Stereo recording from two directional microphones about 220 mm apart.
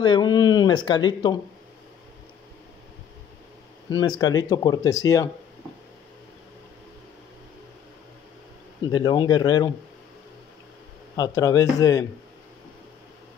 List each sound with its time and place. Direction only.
0.0 s speech: 20° left (ahead or behind)
3.9 s speech: 15° left (ahead or behind)
8.8 s speech: 20° left (ahead or behind)
11.1 s speech: 15° left (ahead or behind)